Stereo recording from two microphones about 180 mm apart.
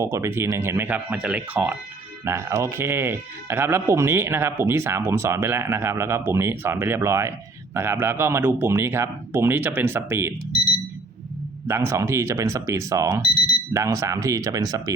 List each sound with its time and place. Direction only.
0.0 s speech: 15° right (ahead or behind)
11.7 s speech: 15° right (ahead or behind)